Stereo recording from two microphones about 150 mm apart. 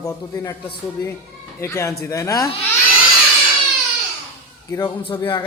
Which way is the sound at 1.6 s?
20° left (ahead or behind).